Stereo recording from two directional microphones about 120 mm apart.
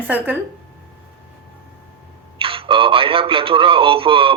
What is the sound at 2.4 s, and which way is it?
Speech, 50° right (ahead or behind).